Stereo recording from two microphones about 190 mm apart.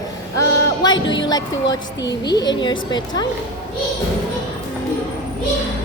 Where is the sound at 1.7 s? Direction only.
20° left (ahead or behind).